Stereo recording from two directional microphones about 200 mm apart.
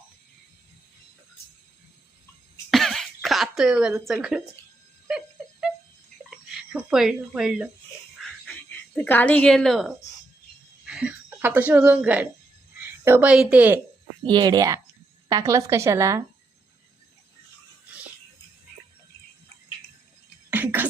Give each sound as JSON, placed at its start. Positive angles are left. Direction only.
{"t": 2.6, "sound": "cough", "side_deg": 0}
{"t": 5.0, "sound": "wail", "side_deg": -5}
{"t": 6.5, "sound": "speech", "side_deg": -5}
{"t": 9.0, "sound": "a woman's voice", "side_deg": 10}
{"t": 10.8, "sound": "a sound", "side_deg": -5}
{"t": 13.1, "sound": "a woman's voice", "side_deg": -10}
{"t": 14.3, "sound": "a woman's voice", "side_deg": -20}
{"t": 20.5, "sound": "a sound", "side_deg": -10}